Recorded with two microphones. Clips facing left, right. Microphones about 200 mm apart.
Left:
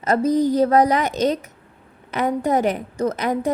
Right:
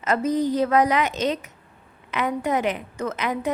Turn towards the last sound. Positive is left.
turn(degrees=40)  # may be behind; listen again after turning